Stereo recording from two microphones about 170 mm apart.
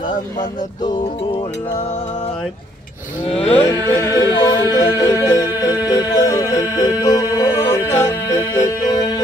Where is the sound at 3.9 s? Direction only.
15° left (ahead or behind).